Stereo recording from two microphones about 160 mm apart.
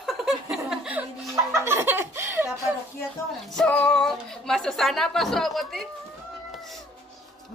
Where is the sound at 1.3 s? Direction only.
20° right (ahead or behind).